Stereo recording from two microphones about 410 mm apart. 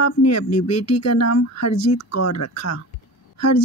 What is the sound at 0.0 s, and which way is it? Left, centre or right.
A woman's voice, left.